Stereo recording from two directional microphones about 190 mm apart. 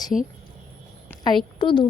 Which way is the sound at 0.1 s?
Centre (ahead or behind).